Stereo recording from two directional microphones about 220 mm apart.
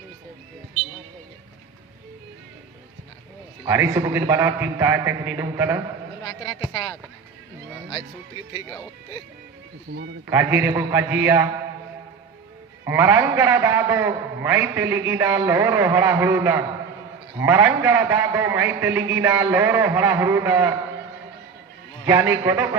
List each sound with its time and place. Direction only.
3.7 s a man's voice: 10° right (ahead or behind)
9.9 s a man's voice: 45° right (ahead or behind)
10.2 s a man's voice: 10° right (ahead or behind)
12.8 s a man's voice: 10° right (ahead or behind)
22.0 s a man's voice: 10° right (ahead or behind)